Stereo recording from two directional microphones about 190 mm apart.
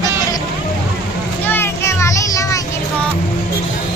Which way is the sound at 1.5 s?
10° left (ahead or behind).